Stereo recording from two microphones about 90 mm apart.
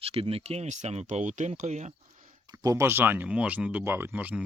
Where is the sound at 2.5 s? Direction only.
40° right (ahead or behind).